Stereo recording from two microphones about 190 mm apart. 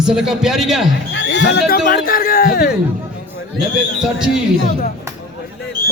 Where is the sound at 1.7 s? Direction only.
50° left (ahead or behind).